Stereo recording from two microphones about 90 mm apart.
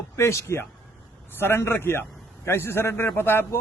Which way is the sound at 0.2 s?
30° left (ahead or behind).